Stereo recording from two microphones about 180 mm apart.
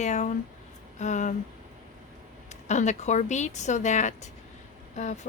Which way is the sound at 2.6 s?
40° left (ahead or behind).